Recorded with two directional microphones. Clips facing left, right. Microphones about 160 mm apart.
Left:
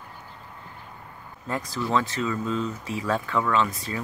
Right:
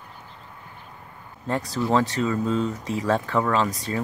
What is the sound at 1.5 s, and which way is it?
Speech, 35° right (ahead or behind).